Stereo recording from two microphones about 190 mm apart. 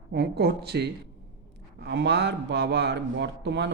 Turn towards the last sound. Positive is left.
turn(degrees=-65)  # may be behind; listen again after turning